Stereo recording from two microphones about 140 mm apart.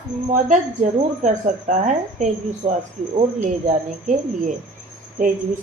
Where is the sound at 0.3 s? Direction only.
60° right (ahead or behind).